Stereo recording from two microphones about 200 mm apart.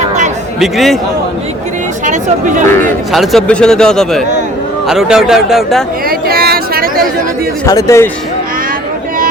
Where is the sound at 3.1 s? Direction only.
Centre (ahead or behind).